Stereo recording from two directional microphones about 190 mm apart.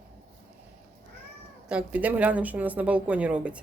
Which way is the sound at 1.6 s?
5° right (ahead or behind).